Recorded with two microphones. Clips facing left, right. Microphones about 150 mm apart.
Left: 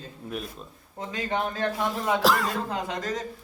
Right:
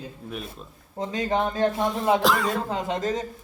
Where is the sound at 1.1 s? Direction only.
30° right (ahead or behind).